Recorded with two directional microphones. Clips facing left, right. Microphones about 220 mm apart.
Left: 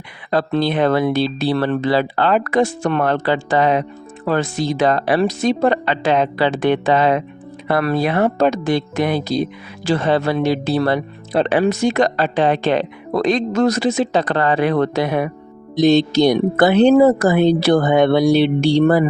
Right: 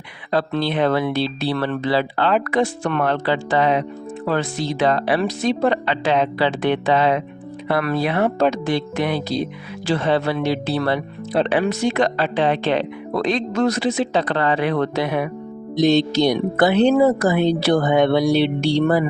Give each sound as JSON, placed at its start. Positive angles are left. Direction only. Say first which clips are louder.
{"t": 0.3, "sound": "speech", "louder": "left 3 dB", "side_deg": 45}